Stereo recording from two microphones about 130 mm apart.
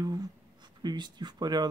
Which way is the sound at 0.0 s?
30° right (ahead or behind).